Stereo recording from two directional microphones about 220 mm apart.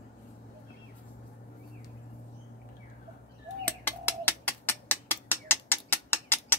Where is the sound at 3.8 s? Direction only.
10° left (ahead or behind).